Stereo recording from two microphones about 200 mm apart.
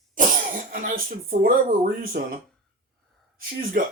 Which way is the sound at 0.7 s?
45° right (ahead or behind).